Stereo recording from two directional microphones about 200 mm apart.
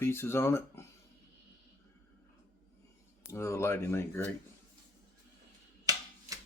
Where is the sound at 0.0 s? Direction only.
10° left (ahead or behind).